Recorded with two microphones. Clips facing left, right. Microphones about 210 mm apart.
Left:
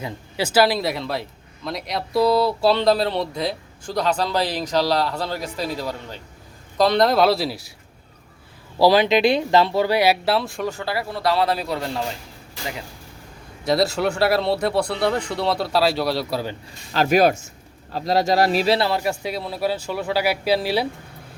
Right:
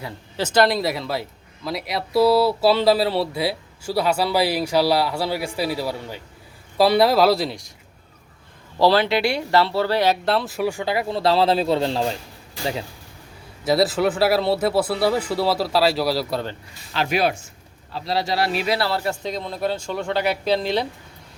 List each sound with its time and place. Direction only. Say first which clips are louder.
0.0 s speech: left 1 dB; 10° left (ahead or behind)
8.8 s speech: left 2 dB; 15° left (ahead or behind); by 12.1 s 30° right (ahead or behind)
13.7 s speech: right 1 dB; centre (ahead or behind)
16.9 s speech: left 5 dB; 45° left (ahead or behind)
18.8 s a man's voice: left 2 dB; 15° left (ahead or behind)